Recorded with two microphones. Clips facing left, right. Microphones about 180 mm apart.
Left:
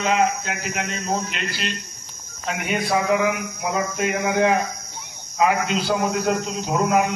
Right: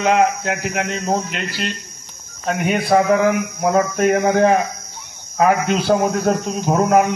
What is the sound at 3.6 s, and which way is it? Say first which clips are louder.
A man's voice: right 9 dB; 50° right (ahead or behind).